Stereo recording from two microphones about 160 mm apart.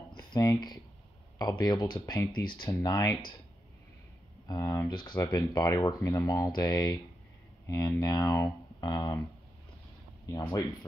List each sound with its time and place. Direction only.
0.1 s a sound: 25° left (ahead or behind)
1.4 s speech: 25° left (ahead or behind)
4.5 s speech: 20° left (ahead or behind)
10.2 s speech: 25° left (ahead or behind)